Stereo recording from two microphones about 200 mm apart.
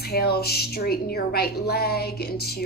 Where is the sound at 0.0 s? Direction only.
50° left (ahead or behind).